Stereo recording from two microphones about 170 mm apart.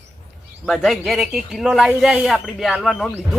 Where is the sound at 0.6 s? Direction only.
Centre (ahead or behind).